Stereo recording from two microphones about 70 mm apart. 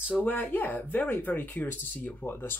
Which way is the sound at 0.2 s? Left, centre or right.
Left.